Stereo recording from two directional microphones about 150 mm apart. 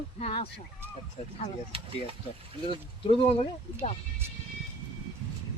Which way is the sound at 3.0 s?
40° left (ahead or behind).